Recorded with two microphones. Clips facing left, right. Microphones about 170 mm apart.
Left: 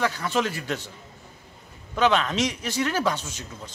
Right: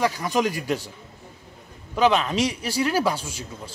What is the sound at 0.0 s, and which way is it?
Speech, 10° right (ahead or behind).